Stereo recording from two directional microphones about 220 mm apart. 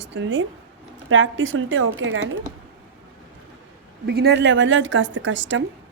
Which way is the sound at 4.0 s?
45° right (ahead or behind).